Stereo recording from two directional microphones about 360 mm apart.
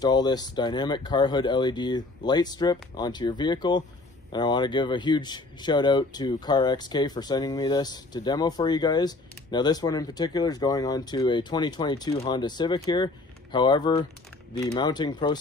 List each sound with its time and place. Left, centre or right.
0.0 s speech: centre